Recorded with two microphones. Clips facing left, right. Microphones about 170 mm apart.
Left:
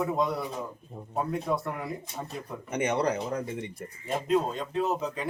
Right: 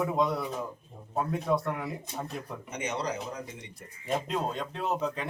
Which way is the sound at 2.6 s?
55° left (ahead or behind).